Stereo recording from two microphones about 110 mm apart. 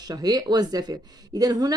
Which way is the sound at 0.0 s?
35° right (ahead or behind).